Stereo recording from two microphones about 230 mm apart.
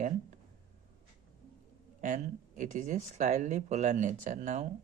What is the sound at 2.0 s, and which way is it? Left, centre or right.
Speech, right.